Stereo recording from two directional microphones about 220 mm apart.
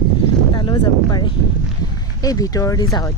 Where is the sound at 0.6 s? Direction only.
20° left (ahead or behind).